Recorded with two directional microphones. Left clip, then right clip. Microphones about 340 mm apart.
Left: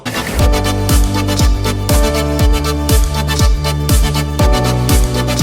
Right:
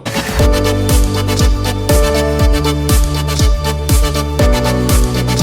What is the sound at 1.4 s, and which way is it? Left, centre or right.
Music, centre.